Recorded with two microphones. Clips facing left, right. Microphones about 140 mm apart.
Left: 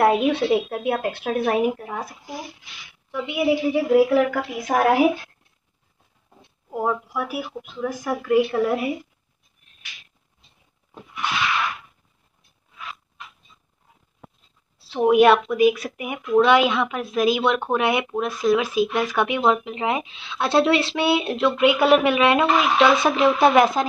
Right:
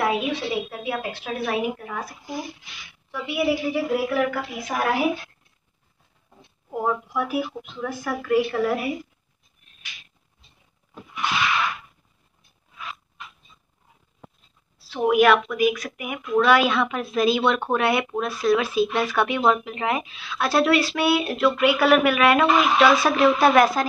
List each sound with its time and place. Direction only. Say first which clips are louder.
0.0 s a woman's voice: left 6 dB; 55° left (ahead or behind)
1.9 s a woman's voice: left 1 dB; 20° left (ahead or behind)
4.3 s a woman's voice: left 5 dB; 50° left (ahead or behind)
6.8 s speech: even; 10° left (ahead or behind)
14.8 s a woman's voice: left 3 dB; 25° left (ahead or behind)